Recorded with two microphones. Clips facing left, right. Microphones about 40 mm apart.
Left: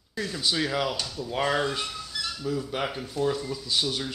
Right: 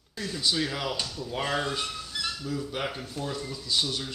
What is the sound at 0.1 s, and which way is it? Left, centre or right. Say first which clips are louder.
Speech: left 1 dB; centre.